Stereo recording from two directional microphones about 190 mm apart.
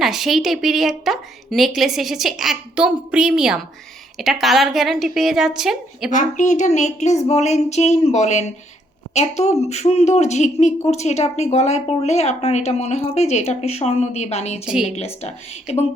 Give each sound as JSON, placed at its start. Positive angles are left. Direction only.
{"t": 0.0, "sound": "a woman's voice", "side_deg": 0}
{"t": 6.1, "sound": "speech", "side_deg": 40}